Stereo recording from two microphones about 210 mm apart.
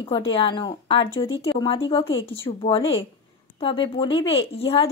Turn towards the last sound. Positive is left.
turn(degrees=25)  # may be behind; listen again after turning